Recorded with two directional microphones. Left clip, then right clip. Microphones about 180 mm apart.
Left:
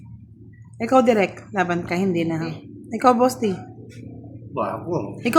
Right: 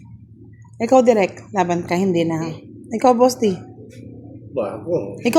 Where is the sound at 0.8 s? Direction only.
15° right (ahead or behind).